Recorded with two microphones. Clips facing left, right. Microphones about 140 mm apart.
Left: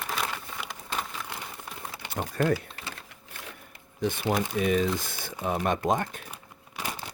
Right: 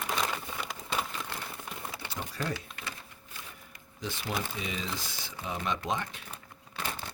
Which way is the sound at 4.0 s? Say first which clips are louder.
Left 8 dB; 55° left (ahead or behind).